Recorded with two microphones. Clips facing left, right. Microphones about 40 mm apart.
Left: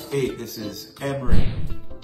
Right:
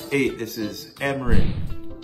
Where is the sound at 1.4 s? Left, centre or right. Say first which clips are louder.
Right 1 dB; centre.